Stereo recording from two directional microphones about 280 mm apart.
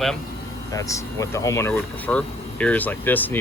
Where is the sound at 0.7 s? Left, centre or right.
Centre.